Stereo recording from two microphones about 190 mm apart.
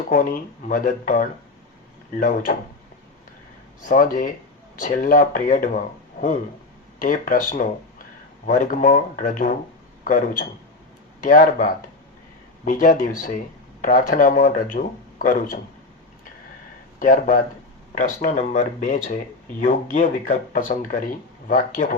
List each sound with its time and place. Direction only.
0.1 s speech: 45° left (ahead or behind)
3.8 s a man's voice: 45° left (ahead or behind)
17.0 s speech: 45° left (ahead or behind)